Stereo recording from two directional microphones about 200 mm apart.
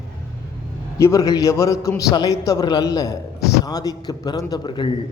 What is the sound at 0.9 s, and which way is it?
A man's voice, 15° left (ahead or behind).